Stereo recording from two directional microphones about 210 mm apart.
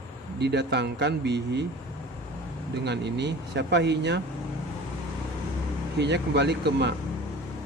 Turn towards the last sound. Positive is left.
turn(degrees=-55)  # may be behind; listen again after turning